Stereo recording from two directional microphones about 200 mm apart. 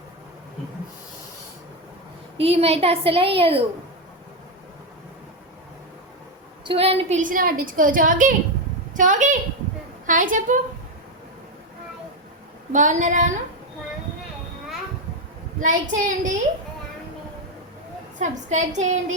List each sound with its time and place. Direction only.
2.4 s a woman's voice: 30° right (ahead or behind)
6.7 s a woman's voice: 30° right (ahead or behind)
12.7 s a woman's voice: 40° right (ahead or behind)
15.6 s a woman's voice: 40° right (ahead or behind)
18.2 s a woman's voice: 35° right (ahead or behind)